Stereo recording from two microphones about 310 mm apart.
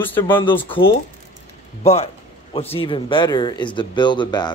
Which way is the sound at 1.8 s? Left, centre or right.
Centre.